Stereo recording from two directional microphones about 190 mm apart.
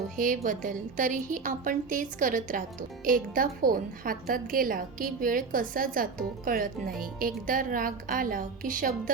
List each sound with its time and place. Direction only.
0.4 s a woman's voice: 45° right (ahead or behind)